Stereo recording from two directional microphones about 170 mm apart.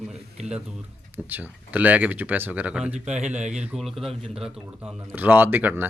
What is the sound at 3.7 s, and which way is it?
Speech, centre (ahead or behind).